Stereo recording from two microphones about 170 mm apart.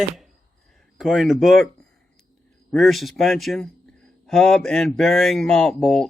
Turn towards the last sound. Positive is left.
turn(degrees=0)  # may be behind; listen again after turning